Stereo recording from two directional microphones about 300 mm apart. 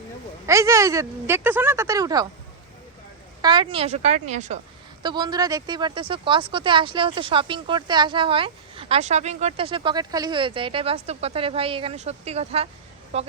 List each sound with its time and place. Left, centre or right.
0.4 s speech: centre
3.4 s a woman's voice: centre